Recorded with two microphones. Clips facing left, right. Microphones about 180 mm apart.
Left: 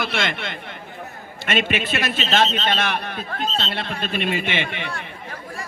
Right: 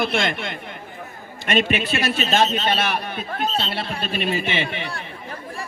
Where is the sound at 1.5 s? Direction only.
40° right (ahead or behind).